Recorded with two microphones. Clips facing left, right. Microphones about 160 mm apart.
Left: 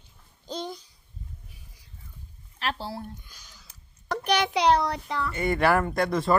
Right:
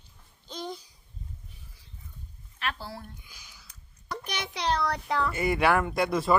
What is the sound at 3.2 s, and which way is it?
Speech, 10° right (ahead or behind).